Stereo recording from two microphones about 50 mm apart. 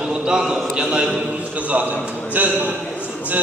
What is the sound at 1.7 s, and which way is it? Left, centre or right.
Speech, right.